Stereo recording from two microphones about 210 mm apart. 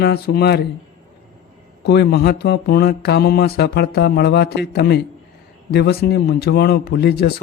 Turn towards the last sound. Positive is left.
turn(degrees=50)  # may be behind; listen again after turning